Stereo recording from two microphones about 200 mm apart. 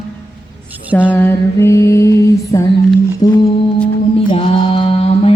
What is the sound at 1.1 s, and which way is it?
Music, 10° left (ahead or behind).